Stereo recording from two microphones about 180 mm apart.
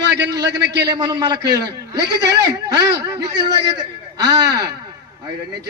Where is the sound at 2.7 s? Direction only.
20° right (ahead or behind).